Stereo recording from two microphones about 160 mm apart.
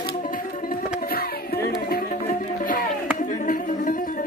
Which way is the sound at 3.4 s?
55° left (ahead or behind).